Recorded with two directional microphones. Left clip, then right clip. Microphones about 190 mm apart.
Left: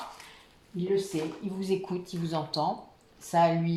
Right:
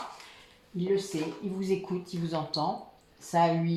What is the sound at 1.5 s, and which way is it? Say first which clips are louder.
Speech: even; 40° left (ahead or behind).